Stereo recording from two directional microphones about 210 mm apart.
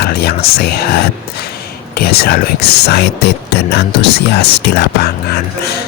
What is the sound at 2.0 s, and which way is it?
Speech, 45° left (ahead or behind).